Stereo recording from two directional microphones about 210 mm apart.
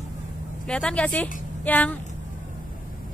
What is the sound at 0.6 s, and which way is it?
A woman's voice, 5° left (ahead or behind).